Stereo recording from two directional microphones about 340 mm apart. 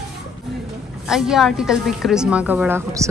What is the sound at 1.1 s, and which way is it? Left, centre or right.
A woman's voice, centre.